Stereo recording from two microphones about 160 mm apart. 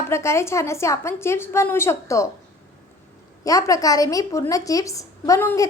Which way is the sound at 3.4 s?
20° left (ahead or behind).